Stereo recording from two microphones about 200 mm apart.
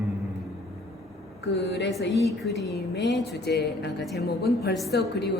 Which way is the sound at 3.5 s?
55° left (ahead or behind).